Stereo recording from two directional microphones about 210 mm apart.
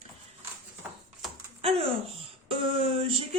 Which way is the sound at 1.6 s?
25° right (ahead or behind).